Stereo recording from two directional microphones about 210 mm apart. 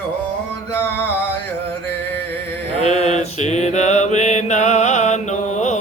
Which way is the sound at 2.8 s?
30° left (ahead or behind).